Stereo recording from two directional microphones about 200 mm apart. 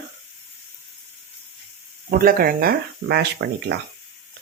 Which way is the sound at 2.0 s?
45° right (ahead or behind).